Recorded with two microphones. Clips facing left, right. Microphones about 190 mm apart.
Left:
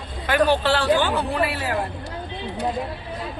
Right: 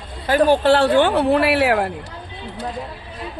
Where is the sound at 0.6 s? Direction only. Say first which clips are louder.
Right 6 dB; 55° right (ahead or behind).